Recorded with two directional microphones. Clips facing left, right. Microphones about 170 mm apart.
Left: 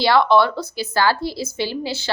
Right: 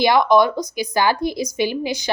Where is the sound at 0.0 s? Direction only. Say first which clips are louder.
Right 1 dB; 15° right (ahead or behind).